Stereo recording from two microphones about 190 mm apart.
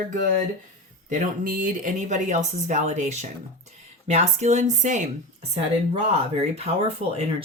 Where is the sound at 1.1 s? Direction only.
45° right (ahead or behind).